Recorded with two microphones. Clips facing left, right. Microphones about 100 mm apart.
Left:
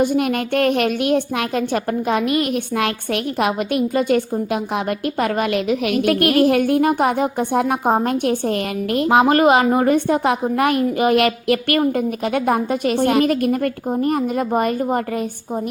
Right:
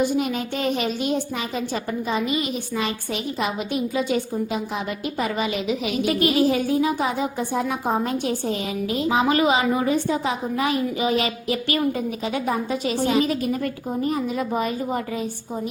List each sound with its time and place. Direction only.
0.0 s a woman's voice: 55° left (ahead or behind)